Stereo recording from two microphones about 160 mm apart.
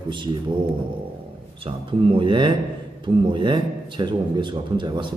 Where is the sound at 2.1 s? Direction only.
30° right (ahead or behind).